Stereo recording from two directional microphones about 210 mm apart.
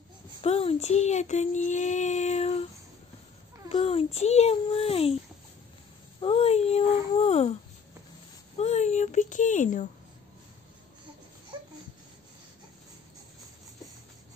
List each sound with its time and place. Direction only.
0.4 s child singing: 25° left (ahead or behind)
3.6 s a child's voice: 30° left (ahead or behind)
6.2 s a child's voice: 30° left (ahead or behind)
8.5 s speech: 30° left (ahead or behind)